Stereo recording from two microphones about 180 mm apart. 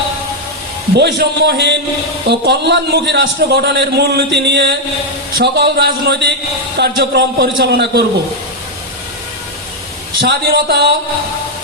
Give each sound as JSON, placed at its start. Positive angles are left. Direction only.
{"t": 0.9, "sound": "a man's voice", "side_deg": -65}
{"t": 10.2, "sound": "a man's voice", "side_deg": -75}